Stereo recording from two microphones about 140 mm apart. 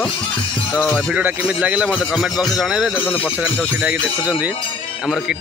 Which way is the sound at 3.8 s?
10° right (ahead or behind).